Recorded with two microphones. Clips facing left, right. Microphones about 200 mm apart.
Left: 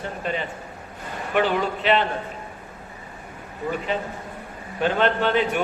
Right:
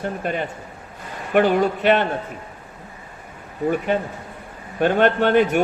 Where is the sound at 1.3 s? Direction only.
50° right (ahead or behind).